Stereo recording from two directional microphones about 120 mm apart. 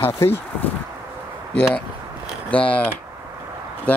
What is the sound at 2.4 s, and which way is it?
Speech, 10° left (ahead or behind).